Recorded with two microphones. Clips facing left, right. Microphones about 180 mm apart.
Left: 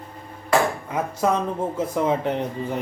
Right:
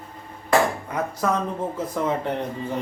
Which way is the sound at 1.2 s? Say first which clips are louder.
Left 3 dB; 20° left (ahead or behind).